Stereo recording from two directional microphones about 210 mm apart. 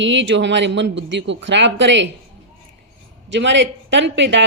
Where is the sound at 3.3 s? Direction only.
60° right (ahead or behind).